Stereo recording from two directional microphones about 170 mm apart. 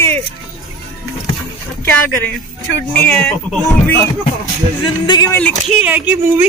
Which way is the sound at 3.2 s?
Centre (ahead or behind).